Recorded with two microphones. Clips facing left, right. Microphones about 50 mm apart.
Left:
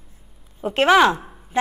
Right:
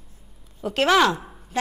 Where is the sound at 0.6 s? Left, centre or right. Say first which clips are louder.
Left 4 dB; left.